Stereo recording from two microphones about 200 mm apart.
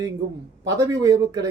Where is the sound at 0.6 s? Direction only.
15° right (ahead or behind).